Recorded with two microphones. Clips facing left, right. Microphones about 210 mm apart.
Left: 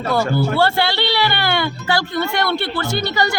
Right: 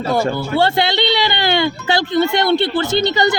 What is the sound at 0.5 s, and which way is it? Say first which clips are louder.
A woman's voice: right 2 dB; 20° right (ahead or behind).